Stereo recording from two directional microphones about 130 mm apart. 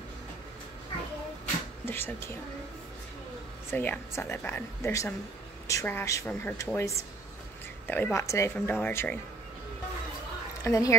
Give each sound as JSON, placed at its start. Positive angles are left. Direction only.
{"t": 1.9, "sound": "speech", "side_deg": 15}
{"t": 3.7, "sound": "a woman's voice", "side_deg": 15}
{"t": 7.9, "sound": "a woman's voice", "side_deg": 20}
{"t": 10.6, "sound": "speech", "side_deg": 25}